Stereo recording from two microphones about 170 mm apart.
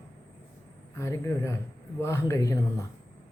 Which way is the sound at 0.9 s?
15° left (ahead or behind).